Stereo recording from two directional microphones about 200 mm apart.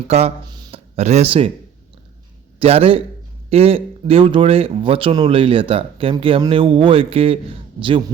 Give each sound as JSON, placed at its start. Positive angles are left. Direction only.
{"t": 0.1, "sound": "speech", "side_deg": -30}
{"t": 0.5, "sound": "a sound", "side_deg": -20}
{"t": 0.9, "sound": "speech", "side_deg": -35}
{"t": 2.6, "sound": "speech", "side_deg": -30}